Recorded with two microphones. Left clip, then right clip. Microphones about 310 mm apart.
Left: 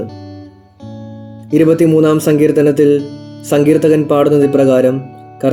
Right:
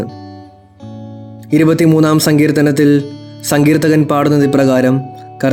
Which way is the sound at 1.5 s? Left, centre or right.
Right.